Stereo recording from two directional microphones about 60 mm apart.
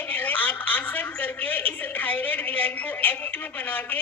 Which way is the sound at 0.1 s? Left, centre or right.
Left.